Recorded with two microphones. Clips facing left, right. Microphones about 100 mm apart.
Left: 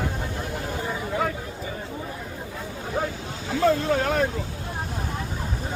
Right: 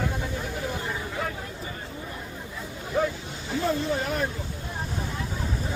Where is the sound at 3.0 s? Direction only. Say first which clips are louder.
Right 3 dB; 40° left (ahead or behind).